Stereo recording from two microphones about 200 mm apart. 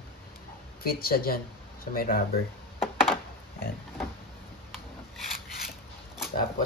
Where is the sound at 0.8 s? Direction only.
50° left (ahead or behind).